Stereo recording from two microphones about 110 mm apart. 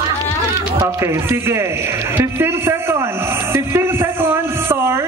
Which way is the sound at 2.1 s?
20° right (ahead or behind).